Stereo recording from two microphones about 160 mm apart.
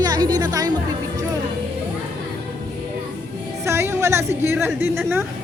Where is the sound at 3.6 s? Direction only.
15° right (ahead or behind).